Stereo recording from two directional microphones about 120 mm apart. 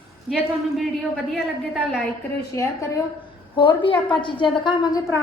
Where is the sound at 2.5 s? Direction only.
25° left (ahead or behind).